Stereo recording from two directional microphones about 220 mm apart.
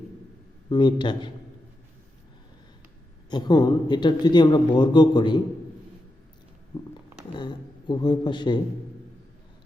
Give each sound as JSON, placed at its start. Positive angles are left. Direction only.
{"t": 0.7, "sound": "a man's voice", "side_deg": 20}
{"t": 3.2, "sound": "a man's voice", "side_deg": 20}
{"t": 7.3, "sound": "a man's voice", "side_deg": 20}